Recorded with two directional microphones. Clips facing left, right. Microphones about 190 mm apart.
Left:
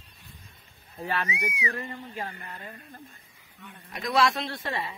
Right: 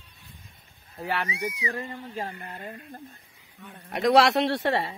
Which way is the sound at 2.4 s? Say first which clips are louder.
Right 3 dB; 40° right (ahead or behind).